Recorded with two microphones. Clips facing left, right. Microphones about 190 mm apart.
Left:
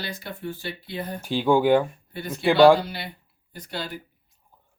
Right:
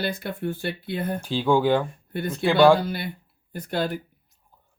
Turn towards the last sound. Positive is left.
turn(degrees=-50)  # may be behind; listen again after turning